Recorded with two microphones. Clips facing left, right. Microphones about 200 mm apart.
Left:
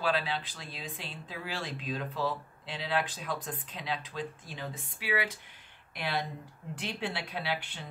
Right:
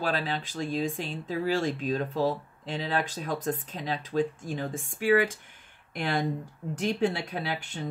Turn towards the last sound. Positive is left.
turn(degrees=-45)  # may be behind; listen again after turning